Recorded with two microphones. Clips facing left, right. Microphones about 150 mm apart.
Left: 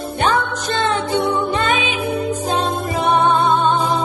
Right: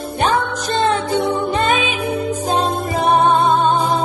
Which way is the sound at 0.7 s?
25° right (ahead or behind).